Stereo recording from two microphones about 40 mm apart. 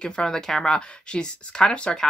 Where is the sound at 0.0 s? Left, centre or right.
Left.